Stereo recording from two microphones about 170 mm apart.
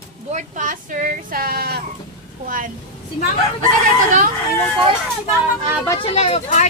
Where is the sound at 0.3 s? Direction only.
50° right (ahead or behind); by 1.8 s 65° right (ahead or behind).